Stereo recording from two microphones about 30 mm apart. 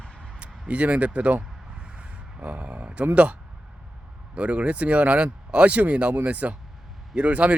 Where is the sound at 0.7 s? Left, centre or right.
Right.